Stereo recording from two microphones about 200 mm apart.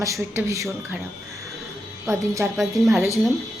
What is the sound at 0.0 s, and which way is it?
Speech, 15° right (ahead or behind).